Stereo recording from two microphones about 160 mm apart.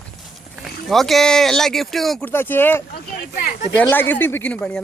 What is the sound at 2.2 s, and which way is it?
Speech, 10° left (ahead or behind).